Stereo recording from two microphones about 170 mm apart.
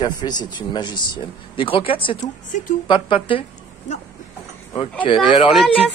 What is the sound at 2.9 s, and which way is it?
Speech, 30° left (ahead or behind).